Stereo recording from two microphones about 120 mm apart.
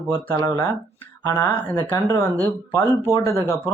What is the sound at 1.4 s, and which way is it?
Speech, 15° left (ahead or behind).